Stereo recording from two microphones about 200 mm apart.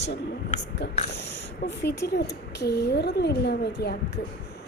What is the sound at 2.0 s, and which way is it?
Speech, 60° left (ahead or behind).